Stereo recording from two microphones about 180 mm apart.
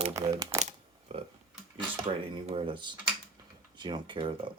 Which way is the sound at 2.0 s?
30° right (ahead or behind).